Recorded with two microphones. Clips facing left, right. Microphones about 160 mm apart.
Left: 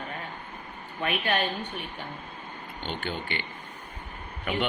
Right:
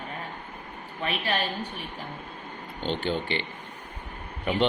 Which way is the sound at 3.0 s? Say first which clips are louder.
Right 5 dB; 30° right (ahead or behind).